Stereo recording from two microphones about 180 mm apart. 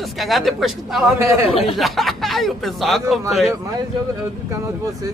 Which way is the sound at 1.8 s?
Centre (ahead or behind).